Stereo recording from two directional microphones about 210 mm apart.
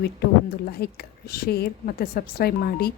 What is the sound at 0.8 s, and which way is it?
A woman's voice, 45° left (ahead or behind).